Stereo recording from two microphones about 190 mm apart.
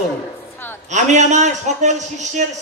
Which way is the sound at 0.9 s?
40° right (ahead or behind).